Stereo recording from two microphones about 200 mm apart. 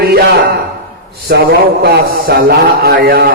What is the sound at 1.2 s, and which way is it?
Mantra, 50° right (ahead or behind).